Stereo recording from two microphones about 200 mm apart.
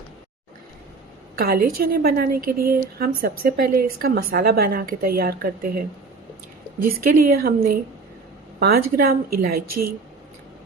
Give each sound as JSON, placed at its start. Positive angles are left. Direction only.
{"t": 1.4, "sound": "a woman's voice", "side_deg": -45}
{"t": 6.8, "sound": "a woman's voice", "side_deg": -45}